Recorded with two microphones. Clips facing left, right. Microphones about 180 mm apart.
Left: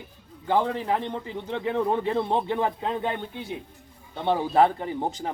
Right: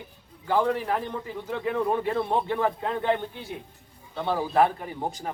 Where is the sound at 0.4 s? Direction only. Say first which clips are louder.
Even; 20° left (ahead or behind).